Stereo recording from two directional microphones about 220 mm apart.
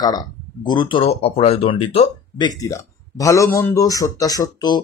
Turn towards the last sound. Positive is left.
turn(degrees=15)  # may be behind; listen again after turning